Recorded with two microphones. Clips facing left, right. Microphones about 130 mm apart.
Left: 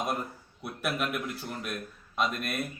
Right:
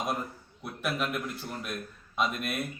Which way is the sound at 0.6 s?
5° left (ahead or behind).